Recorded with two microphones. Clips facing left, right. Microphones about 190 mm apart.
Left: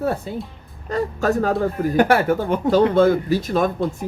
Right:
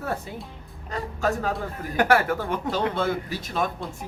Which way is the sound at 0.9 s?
45° left (ahead or behind).